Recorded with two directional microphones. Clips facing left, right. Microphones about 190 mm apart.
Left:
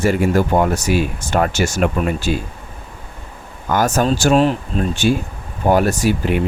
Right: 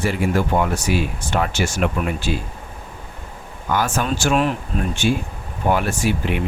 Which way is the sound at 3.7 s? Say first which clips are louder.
Left 5 dB; 40° left (ahead or behind).